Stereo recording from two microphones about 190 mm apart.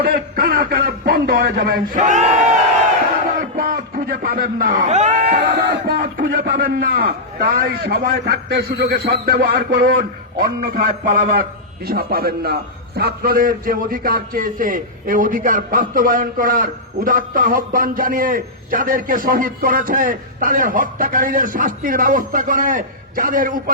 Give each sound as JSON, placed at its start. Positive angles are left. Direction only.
{"t": 0.0, "sound": "a man's voice", "side_deg": -50}
{"t": 3.3, "sound": "a sound", "side_deg": -50}
{"t": 4.2, "sound": "a man's voice", "side_deg": -50}
{"t": 5.3, "sound": "a man's voice", "side_deg": -50}